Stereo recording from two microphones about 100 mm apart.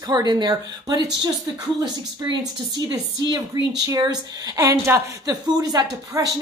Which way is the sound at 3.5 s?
45° right (ahead or behind).